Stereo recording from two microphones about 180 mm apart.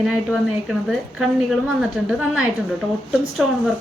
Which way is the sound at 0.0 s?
5° right (ahead or behind).